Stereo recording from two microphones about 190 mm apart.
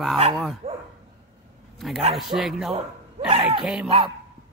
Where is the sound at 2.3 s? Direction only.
Centre (ahead or behind).